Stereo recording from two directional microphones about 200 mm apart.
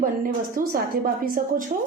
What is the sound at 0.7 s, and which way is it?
Speech, 45° right (ahead or behind).